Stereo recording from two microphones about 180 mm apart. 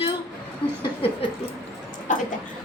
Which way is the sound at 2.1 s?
45° left (ahead or behind).